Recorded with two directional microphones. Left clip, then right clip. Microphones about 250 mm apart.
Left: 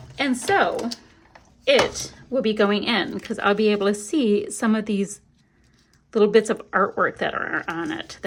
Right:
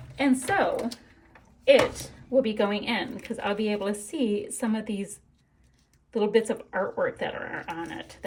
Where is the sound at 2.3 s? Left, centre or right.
Centre.